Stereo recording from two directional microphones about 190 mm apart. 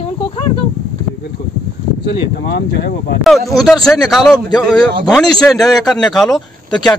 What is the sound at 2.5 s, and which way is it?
Speech, 60° left (ahead or behind).